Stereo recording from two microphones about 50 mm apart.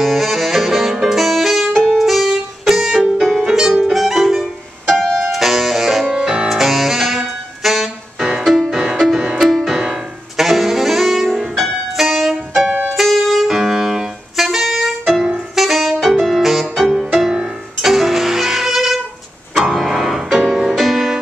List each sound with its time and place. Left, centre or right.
0.0 s music: centre
4.8 s music: centre
5.3 s music: centre
6.5 s music: centre
9.8 s saxophone: centre
12.9 s music: centre
15.5 s saxophone: centre
16.8 s music: centre
17.2 s music: centre
17.8 s violin: centre
19.7 s music: centre